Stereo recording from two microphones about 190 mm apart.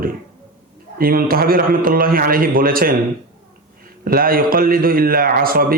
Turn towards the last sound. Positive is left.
turn(degrees=-50)  # may be behind; listen again after turning